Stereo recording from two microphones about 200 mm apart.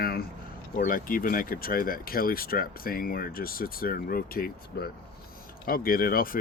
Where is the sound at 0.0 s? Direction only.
50° left (ahead or behind).